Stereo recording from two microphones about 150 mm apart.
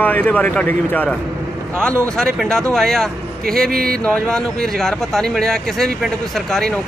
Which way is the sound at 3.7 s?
75° right (ahead or behind).